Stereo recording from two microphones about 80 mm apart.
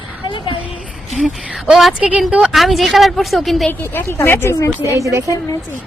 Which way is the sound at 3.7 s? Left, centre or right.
Left.